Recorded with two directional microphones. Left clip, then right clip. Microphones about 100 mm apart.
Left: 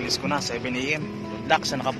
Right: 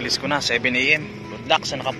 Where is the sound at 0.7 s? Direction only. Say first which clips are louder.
Right 8 dB; centre (ahead or behind).